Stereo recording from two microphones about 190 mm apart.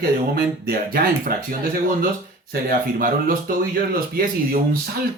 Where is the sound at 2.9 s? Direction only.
50° right (ahead or behind).